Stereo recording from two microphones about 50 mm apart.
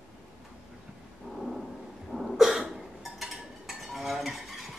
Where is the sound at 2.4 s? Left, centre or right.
Centre.